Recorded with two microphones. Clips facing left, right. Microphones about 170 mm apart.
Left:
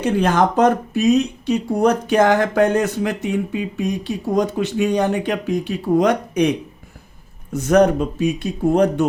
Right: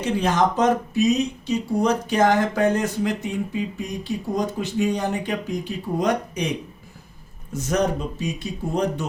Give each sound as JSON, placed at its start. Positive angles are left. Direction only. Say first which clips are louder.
{"t": 0.0, "sound": "speech", "louder": "left 4 dB", "side_deg": 55}
{"t": 7.5, "sound": "speech", "louder": "left 8 dB", "side_deg": 65}